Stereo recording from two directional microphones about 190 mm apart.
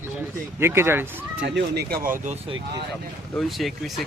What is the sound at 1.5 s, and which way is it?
Speech, 60° right (ahead or behind).